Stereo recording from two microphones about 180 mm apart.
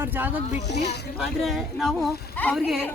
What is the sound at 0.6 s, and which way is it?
Speech, 65° left (ahead or behind).